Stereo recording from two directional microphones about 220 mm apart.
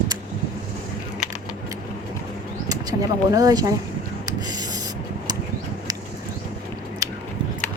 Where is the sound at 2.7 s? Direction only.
15° right (ahead or behind).